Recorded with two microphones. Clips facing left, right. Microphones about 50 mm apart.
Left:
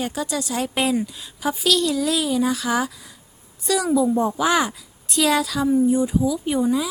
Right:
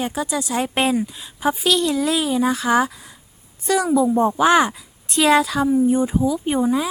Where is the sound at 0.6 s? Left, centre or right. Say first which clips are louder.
Right 2 dB; right.